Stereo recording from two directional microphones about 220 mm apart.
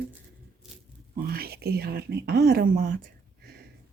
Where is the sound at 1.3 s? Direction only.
45° right (ahead or behind).